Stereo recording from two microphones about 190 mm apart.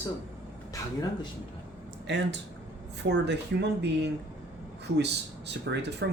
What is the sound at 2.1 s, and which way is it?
Speech, 65° right (ahead or behind).